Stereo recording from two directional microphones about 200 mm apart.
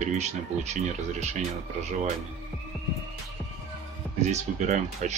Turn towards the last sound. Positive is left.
turn(degrees=-35)  # may be behind; listen again after turning